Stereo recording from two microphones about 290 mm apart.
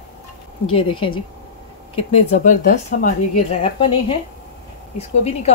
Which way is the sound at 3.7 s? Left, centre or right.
Centre.